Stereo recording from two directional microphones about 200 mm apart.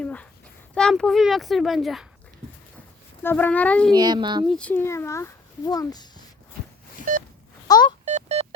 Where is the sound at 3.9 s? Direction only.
20° right (ahead or behind).